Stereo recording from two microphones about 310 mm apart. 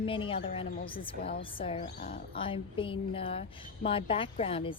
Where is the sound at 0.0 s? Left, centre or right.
Centre.